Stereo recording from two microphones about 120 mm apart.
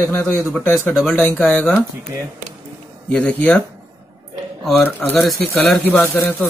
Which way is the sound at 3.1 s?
10° left (ahead or behind).